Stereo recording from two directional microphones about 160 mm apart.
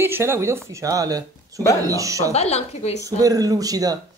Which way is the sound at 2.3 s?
40° left (ahead or behind).